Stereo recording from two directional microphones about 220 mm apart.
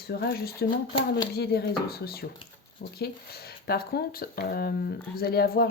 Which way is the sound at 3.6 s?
45° left (ahead or behind).